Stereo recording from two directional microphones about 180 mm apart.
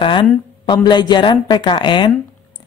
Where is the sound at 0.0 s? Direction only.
25° left (ahead or behind).